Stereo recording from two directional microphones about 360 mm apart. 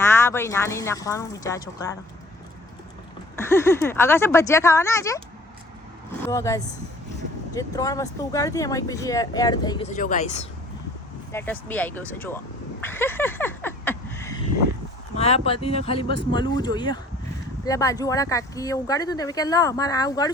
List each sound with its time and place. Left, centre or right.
0.0 s speech: centre
3.3 s speech: centre
6.2 s speech: centre
11.3 s speech: centre
12.8 s a sound: centre
15.1 s speech: centre